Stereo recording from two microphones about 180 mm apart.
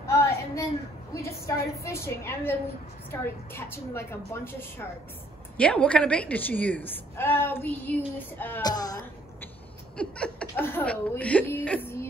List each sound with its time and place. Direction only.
0.0 s a sound: 15° left (ahead or behind)
1.1 s a woman's voice: 15° left (ahead or behind)
8.6 s a woman's voice: 20° left (ahead or behind)
9.9 s speech: 5° left (ahead or behind)